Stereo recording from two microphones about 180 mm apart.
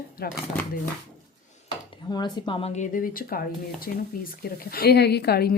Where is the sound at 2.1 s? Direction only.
25° left (ahead or behind).